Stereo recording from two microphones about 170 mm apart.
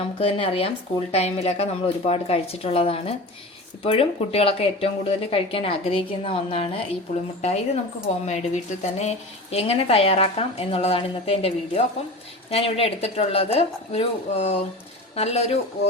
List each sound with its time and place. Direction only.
0.0 s a woman's voice: 35° left (ahead or behind)
8.2 s a woman's voice: 40° left (ahead or behind)